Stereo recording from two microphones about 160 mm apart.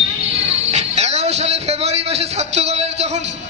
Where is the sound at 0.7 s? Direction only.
45° right (ahead or behind).